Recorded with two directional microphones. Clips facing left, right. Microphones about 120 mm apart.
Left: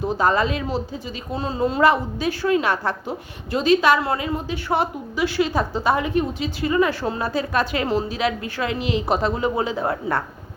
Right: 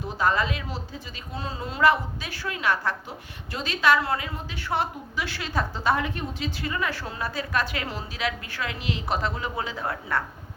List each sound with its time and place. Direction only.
0.2 s a woman's voice: 30° left (ahead or behind); by 6.7 s 15° left (ahead or behind)
6.7 s a woman's voice: 25° left (ahead or behind)